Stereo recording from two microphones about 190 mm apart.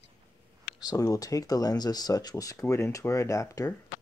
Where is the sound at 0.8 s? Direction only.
20° left (ahead or behind).